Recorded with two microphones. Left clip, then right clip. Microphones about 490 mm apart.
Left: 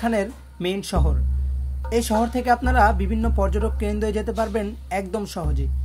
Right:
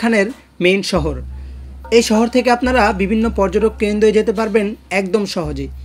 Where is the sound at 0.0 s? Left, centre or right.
Left.